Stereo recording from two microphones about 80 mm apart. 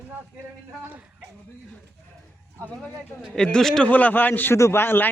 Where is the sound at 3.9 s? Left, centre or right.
Left.